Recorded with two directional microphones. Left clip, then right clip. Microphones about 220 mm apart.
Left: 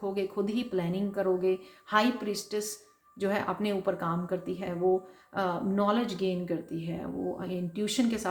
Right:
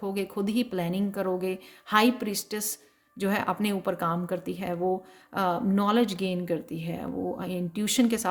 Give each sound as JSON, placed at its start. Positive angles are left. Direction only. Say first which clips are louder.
{"t": 0.0, "sound": "speech", "louder": "even", "side_deg": -50}